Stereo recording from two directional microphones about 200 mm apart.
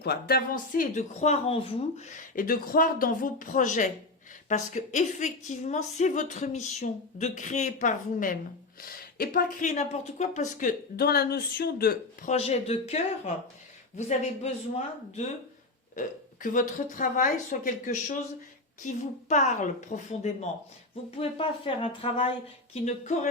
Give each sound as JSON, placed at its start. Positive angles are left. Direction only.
{"t": 0.0, "sound": "a woman's voice", "side_deg": 50}
{"t": 19.3, "sound": "speech", "side_deg": 35}